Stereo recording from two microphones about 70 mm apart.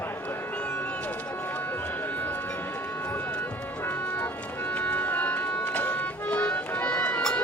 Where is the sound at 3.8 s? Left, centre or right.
Left.